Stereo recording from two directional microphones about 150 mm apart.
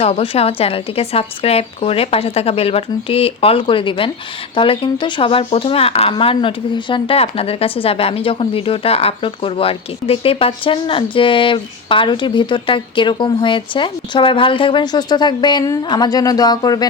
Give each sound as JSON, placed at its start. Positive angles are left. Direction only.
{"t": 0.0, "sound": "speech", "side_deg": 40}